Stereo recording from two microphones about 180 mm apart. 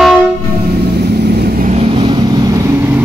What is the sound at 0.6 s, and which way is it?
Vehicle, 65° right (ahead or behind).